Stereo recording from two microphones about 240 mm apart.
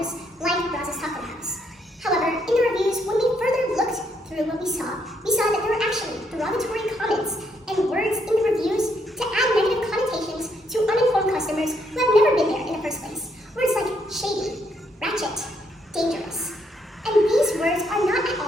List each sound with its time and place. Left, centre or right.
0.0 s music: centre
2.0 s a sound: centre
16.0 s child singing: centre
17.0 s chuckle: centre